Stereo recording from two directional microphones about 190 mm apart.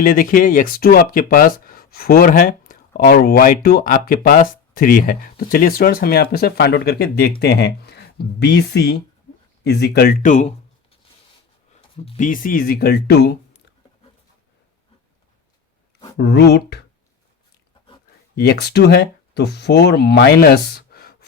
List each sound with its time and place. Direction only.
0.0 s speech: 45° left (ahead or behind)
12.1 s speech: 45° left (ahead or behind); by 13.3 s 60° left (ahead or behind)
16.1 s speech: 55° left (ahead or behind)
18.3 s speech: 55° left (ahead or behind)